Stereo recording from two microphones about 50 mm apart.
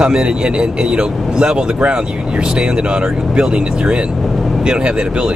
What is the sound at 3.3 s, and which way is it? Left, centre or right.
Speech, centre.